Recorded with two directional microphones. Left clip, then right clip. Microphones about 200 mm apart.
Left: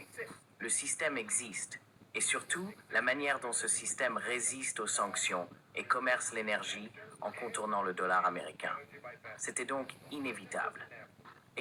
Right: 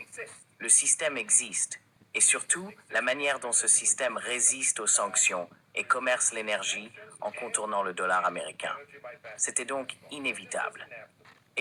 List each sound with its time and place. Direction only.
0.7 s speech: 40° right (ahead or behind)
2.3 s speech: 35° right (ahead or behind)